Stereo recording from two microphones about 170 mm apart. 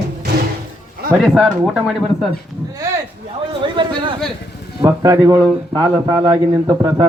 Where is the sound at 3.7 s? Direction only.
30° right (ahead or behind).